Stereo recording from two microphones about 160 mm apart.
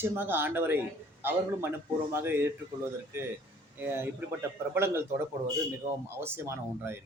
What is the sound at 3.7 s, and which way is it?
Speech, 15° right (ahead or behind).